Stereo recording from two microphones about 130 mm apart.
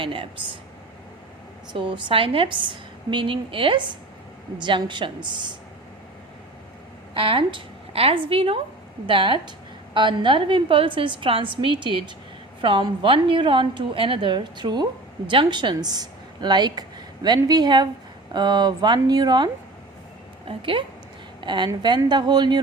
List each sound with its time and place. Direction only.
0.0 s speech: 40° right (ahead or behind)
1.7 s a woman's voice: 40° right (ahead or behind)
7.1 s a woman's voice: 45° right (ahead or behind)
20.5 s a woman's voice: 40° right (ahead or behind)